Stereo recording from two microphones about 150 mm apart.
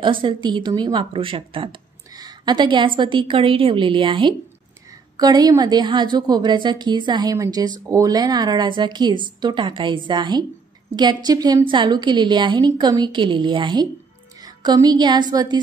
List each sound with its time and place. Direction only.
0.0 s a woman's voice: 35° right (ahead or behind)